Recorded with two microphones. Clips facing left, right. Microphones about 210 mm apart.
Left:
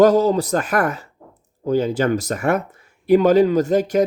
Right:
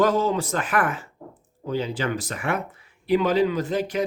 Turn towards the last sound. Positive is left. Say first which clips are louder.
# left 8 dB
turn(degrees=45)  # may be behind; listen again after turning